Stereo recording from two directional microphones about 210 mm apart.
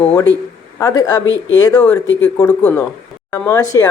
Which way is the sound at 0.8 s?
15° left (ahead or behind).